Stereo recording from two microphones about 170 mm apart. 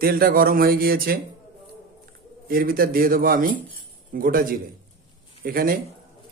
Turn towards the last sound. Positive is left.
turn(degrees=-60)  # may be behind; listen again after turning